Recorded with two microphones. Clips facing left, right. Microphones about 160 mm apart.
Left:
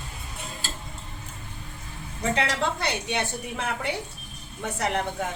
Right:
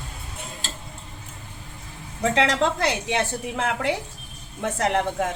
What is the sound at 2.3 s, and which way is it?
A woman's voice, 90° right.